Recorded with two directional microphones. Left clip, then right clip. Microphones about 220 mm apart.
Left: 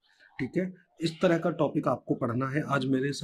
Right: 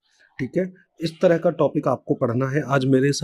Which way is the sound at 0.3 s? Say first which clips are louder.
Right 7 dB; 40° right (ahead or behind).